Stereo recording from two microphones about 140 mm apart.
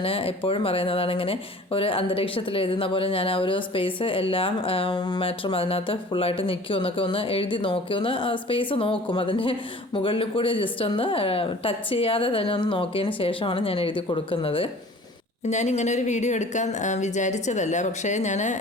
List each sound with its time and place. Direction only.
0.0 s speech: 40° left (ahead or behind)
15.4 s a woman's voice: 55° left (ahead or behind)